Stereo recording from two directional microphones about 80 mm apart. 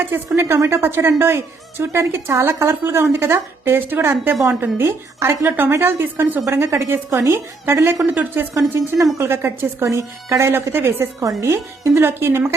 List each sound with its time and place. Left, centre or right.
0.3 s a woman's voice: right
8.1 s a woman's voice: right
10.5 s a woman's voice: right
11.2 s a woman's voice: right